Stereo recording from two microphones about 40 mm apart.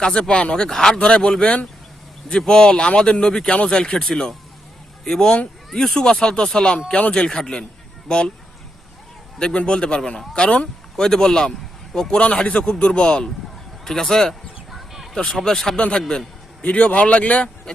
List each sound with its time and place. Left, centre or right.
0.0 s a man's voice: centre
0.9 s a man's voice: left; by 6.0 s centre
6.0 s a man's voice: left
9.4 s a man's voice: left
13.8 s speech: centre
14.7 s bird: centre
15.3 s speech: centre
15.9 s a man's voice: left
16.6 s a man's voice: left